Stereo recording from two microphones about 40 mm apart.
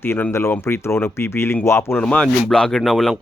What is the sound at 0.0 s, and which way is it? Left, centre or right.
Speech, left.